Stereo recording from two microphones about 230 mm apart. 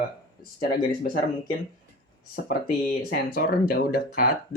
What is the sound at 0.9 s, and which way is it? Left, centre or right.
Speech, left.